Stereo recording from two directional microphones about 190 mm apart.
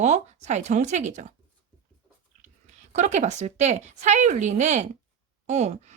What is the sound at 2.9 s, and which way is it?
Speech, 35° right (ahead or behind).